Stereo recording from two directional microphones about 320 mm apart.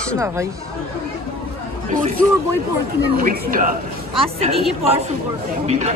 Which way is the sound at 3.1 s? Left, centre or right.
Right.